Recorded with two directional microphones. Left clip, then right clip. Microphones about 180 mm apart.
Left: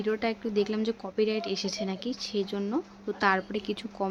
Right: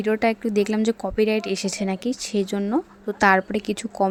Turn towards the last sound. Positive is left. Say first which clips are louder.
# right 9 dB
turn(degrees=-40)  # may be behind; listen again after turning